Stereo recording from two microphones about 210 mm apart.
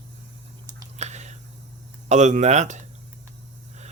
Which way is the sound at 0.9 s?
30° right (ahead or behind).